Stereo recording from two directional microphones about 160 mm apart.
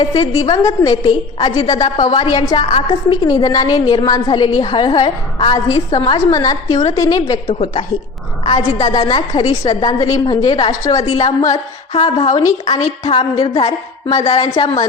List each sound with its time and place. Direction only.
0.0 s a woman's voice: 30° left (ahead or behind)
7.4 s a woman's voice: 40° left (ahead or behind)
8.4 s a woman's voice: 25° left (ahead or behind)
12.8 s a woman's voice: 35° left (ahead or behind)
13.7 s a woman's voice: 25° left (ahead or behind)